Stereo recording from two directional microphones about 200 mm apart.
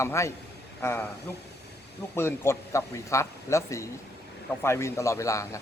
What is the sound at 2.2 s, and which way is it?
A man's voice, 10° left (ahead or behind).